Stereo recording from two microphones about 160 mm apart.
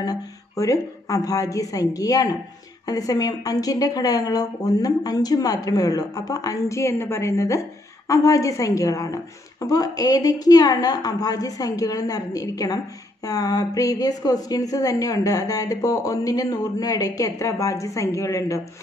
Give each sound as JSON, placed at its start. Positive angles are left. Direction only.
{"t": 0.0, "sound": "a woman's voice", "side_deg": 25}